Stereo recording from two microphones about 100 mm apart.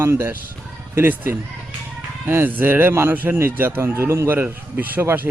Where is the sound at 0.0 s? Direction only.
25° right (ahead or behind).